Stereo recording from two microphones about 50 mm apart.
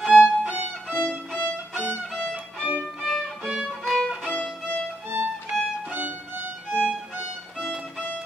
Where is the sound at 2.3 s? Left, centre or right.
Right.